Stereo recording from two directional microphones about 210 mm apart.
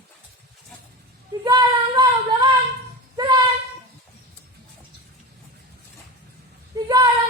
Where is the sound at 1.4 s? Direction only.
20° right (ahead or behind).